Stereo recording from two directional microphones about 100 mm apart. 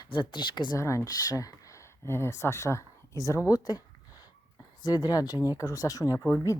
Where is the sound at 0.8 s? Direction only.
30° left (ahead or behind).